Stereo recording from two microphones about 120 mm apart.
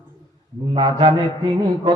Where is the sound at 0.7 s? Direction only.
35° right (ahead or behind).